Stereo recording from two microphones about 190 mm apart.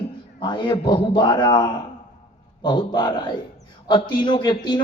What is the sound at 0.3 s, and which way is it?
A woman's voice, 25° left (ahead or behind).